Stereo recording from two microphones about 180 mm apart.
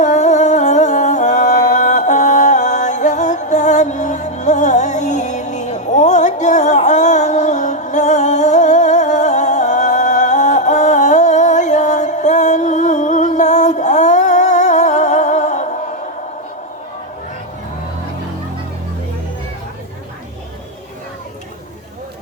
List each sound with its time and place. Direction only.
0.0 s music: 40° left (ahead or behind)